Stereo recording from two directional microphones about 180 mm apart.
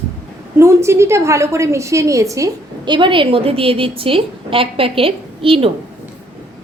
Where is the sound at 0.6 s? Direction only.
15° right (ahead or behind); by 5.7 s 30° right (ahead or behind).